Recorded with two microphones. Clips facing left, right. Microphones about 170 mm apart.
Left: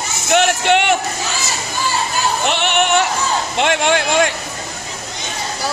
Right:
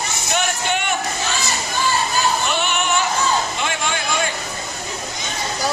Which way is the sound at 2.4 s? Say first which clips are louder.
Left 4 dB; 70° left (ahead or behind).